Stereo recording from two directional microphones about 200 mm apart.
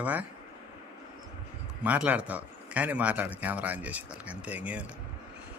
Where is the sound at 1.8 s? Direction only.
5° right (ahead or behind).